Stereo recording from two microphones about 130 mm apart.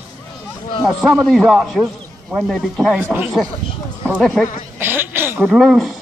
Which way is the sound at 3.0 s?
15° right (ahead or behind).